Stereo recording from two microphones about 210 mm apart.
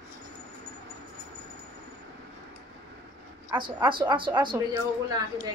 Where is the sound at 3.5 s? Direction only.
10° right (ahead or behind).